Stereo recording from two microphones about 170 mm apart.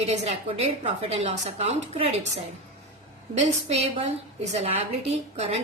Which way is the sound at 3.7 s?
40° right (ahead or behind).